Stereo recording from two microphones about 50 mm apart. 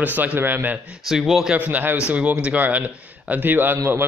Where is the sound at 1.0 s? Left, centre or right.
Centre.